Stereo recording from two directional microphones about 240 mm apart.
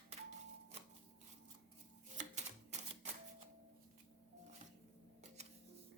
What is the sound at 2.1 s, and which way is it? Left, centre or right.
Typewriter, right.